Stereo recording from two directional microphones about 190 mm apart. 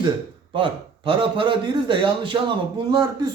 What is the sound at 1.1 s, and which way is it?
A man's voice, 25° right (ahead or behind).